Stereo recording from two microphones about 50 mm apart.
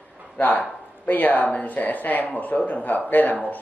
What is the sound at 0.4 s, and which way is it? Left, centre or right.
Speech, left.